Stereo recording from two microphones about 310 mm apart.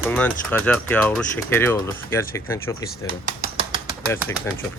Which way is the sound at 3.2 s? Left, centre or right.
Centre.